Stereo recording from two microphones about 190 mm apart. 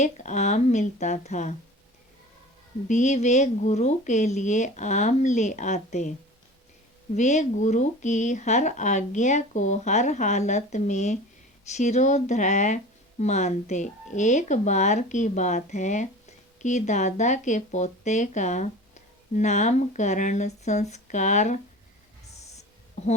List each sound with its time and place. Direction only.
0.0 s speech: 40° left (ahead or behind)
2.9 s speech: 35° left (ahead or behind)
7.2 s speech: 40° left (ahead or behind)
22.3 s a sound: 35° left (ahead or behind)